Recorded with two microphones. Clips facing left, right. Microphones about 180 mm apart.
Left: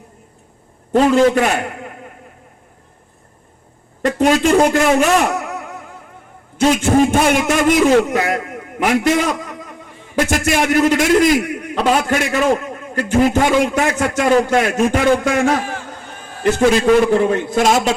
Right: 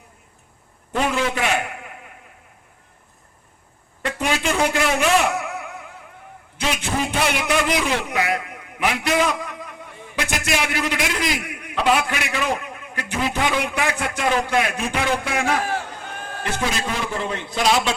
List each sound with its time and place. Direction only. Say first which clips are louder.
0.9 s a man's voice: left 10 dB; 45° left (ahead or behind)
4.0 s a man's voice: left 9 dB; 45° left (ahead or behind)